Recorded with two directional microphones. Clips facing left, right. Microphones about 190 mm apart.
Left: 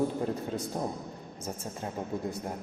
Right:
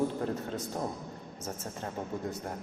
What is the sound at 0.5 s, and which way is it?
Speech, 15° left (ahead or behind).